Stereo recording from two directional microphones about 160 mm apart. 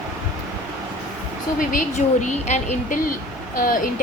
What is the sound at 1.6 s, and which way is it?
A woman's voice, 55° left (ahead or behind).